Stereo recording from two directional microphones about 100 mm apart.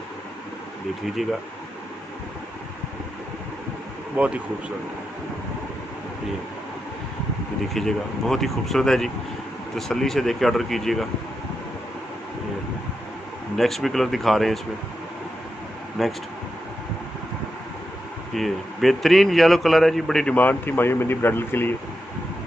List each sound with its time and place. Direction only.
4.2 s speech: 10° right (ahead or behind)
7.7 s a man's voice: 5° left (ahead or behind)
13.6 s a man's voice: centre (ahead or behind)
16.0 s a man's voice: centre (ahead or behind)
18.3 s a man's voice: centre (ahead or behind)
20.3 s speech: 20° left (ahead or behind)